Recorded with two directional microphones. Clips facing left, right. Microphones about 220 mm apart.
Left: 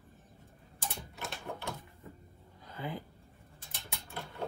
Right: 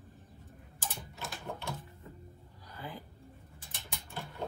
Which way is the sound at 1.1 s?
15° left (ahead or behind).